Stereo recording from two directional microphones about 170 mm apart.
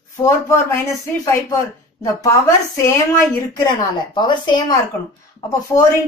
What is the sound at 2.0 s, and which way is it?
A woman's voice, 15° left (ahead or behind).